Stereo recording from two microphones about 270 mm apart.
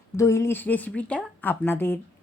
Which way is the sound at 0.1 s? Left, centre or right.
Centre.